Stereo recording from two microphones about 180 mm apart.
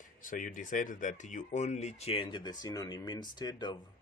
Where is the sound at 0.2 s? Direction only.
50° left (ahead or behind).